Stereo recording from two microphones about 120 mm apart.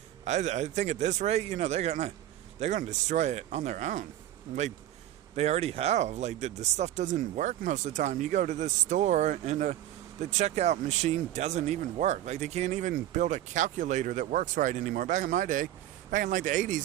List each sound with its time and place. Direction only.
0.3 s speech: 75° right (ahead or behind)
2.6 s speech: 90° right
5.4 s speech: 60° right (ahead or behind); by 9.7 s 80° right
10.2 s a man's voice: 70° right (ahead or behind); by 16.8 s 90° right